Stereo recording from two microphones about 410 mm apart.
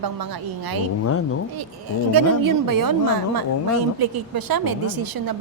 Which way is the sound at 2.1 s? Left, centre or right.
Right.